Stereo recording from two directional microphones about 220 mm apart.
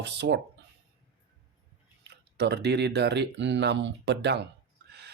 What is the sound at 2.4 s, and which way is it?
Speech, 50° right (ahead or behind).